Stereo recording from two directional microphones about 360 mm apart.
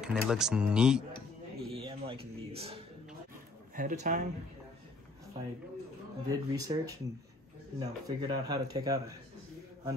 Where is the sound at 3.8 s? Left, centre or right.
Right.